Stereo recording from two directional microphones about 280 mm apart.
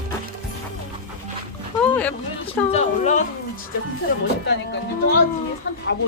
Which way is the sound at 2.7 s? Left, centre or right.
Left.